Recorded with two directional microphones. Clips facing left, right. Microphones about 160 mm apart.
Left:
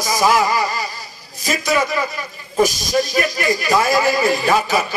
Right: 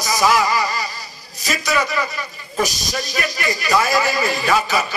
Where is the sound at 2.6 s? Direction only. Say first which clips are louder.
Left 8 dB; 50° left (ahead or behind).